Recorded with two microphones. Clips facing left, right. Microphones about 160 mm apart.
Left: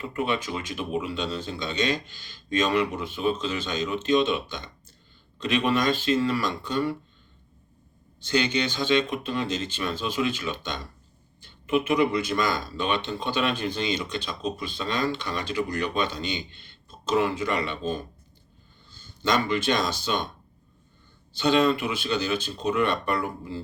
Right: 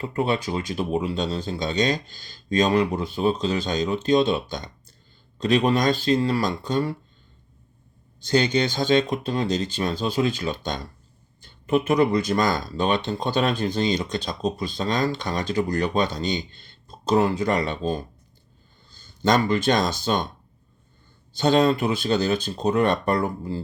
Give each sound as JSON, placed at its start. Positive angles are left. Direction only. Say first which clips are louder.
{"t": 0.0, "sound": "speech", "louder": "right 4 dB", "side_deg": -35}
{"t": 8.5, "sound": "speech", "louder": "right 4 dB", "side_deg": -40}
{"t": 21.3, "sound": "speech", "louder": "right 3 dB", "side_deg": -45}